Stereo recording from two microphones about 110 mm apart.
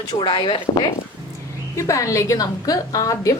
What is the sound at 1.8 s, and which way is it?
A woman's voice, 30° left (ahead or behind).